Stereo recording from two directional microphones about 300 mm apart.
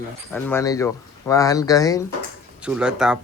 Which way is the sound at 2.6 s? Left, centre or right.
Centre.